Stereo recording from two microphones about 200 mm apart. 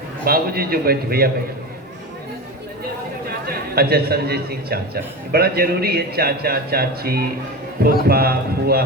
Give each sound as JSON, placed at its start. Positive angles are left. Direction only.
{"t": 0.3, "sound": "a man's voice", "side_deg": -50}
{"t": 3.8, "sound": "a man's voice", "side_deg": -50}